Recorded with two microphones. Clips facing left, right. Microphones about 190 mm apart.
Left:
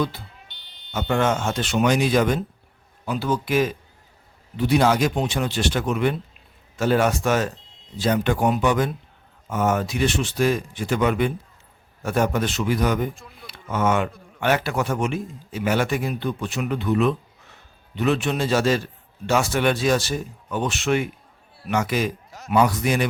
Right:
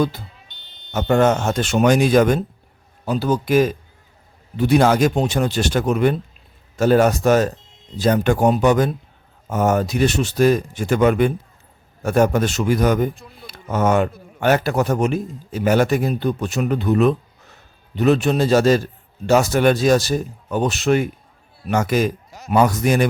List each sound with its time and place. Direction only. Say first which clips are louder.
0.9 s a man's voice: right 6 dB; 45° right (ahead or behind)